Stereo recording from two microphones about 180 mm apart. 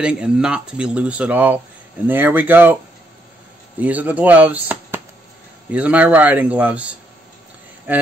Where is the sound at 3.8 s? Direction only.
10° right (ahead or behind).